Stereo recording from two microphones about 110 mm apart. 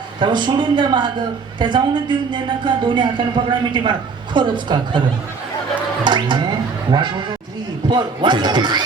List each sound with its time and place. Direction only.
0.2 s a woman's voice: 45° right (ahead or behind)
6.1 s a woman's voice: 45° right (ahead or behind)